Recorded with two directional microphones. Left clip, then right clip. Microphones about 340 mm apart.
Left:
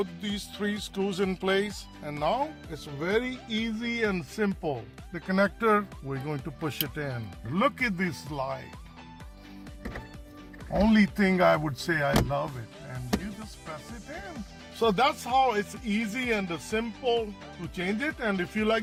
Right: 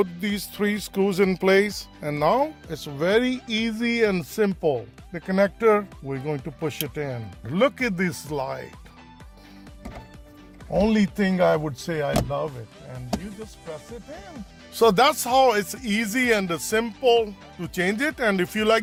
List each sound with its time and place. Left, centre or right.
0.0 s speech: right
10.8 s speech: right
12.5 s speech: centre
14.8 s speech: right